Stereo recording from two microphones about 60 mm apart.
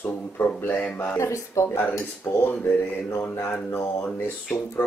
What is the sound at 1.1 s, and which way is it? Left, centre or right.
Speech, left.